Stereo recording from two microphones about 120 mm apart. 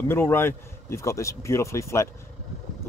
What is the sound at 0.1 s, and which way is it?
Speech, 20° left (ahead or behind).